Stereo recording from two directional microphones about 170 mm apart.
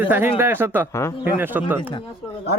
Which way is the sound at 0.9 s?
15° left (ahead or behind).